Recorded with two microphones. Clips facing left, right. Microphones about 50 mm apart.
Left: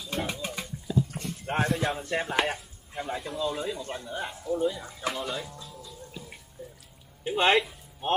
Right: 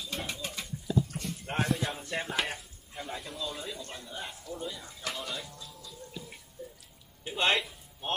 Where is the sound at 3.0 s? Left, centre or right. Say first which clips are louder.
Left 7 dB; left.